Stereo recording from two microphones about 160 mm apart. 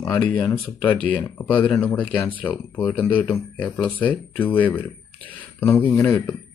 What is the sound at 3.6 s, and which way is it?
Speech, 30° left (ahead or behind).